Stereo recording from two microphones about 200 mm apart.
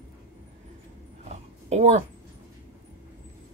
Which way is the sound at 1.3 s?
35° right (ahead or behind).